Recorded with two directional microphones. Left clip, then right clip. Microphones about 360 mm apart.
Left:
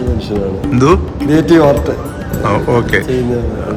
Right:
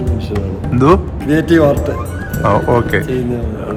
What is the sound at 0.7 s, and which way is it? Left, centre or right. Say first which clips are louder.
A man's voice: even; centre.